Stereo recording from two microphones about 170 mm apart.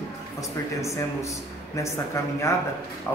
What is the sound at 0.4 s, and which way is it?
Speech, 20° left (ahead or behind).